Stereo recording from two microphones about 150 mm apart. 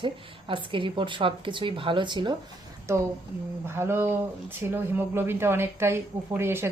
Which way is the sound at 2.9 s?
20° right (ahead or behind).